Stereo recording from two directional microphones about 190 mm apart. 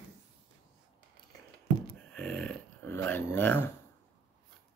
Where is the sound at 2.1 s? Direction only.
5° left (ahead or behind).